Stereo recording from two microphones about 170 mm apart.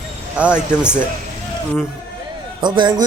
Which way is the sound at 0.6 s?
5° right (ahead or behind).